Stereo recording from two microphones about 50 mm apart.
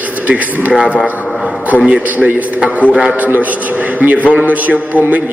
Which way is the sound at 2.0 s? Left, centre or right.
Right.